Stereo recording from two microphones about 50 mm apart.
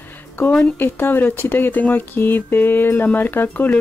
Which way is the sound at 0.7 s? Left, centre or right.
Left.